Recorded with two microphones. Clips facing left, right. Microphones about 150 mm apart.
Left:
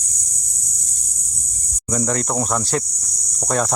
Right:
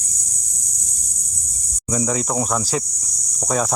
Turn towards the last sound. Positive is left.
turn(degrees=0)  # may be behind; listen again after turning